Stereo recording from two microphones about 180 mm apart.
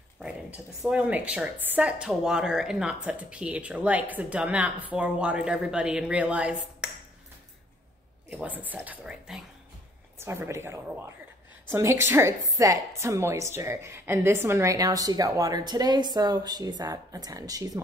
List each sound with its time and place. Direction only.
0.2 s a woman's voice: 5° right (ahead or behind)
8.3 s a woman's voice: 10° right (ahead or behind)